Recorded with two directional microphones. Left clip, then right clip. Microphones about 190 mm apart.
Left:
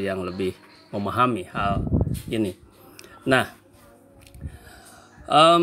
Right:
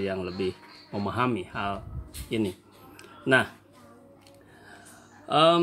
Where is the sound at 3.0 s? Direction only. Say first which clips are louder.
Left 2 dB; 25° left (ahead or behind).